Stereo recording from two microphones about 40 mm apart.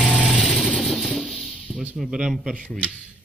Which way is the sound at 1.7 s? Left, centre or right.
Left.